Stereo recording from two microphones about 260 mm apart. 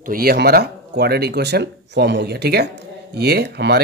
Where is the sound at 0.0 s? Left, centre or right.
Right.